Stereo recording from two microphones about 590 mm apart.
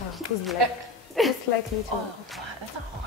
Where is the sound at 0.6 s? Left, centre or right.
Right.